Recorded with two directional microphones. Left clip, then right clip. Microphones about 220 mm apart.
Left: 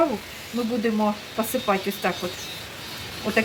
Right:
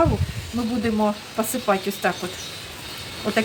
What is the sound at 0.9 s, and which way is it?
Speech, 20° right (ahead or behind).